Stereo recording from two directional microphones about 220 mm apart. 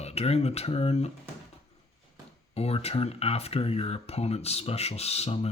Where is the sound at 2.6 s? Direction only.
30° left (ahead or behind).